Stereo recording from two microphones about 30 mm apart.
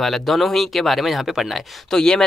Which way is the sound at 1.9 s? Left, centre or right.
Left.